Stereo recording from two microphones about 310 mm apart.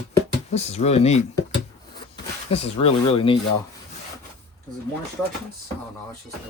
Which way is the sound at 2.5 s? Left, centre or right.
Centre.